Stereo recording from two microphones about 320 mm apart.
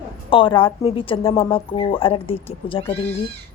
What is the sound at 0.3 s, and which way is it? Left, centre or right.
Speech, centre.